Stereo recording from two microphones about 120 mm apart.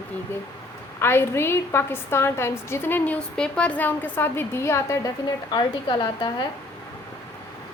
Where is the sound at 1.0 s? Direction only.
20° left (ahead or behind).